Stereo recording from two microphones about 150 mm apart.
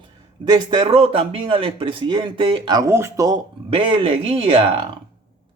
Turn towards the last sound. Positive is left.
turn(degrees=-35)  # may be behind; listen again after turning